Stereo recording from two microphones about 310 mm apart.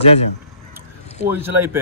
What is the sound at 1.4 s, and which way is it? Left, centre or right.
Speech, centre.